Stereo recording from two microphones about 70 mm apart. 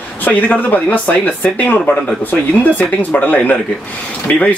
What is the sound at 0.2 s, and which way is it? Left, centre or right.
A man's voice, left.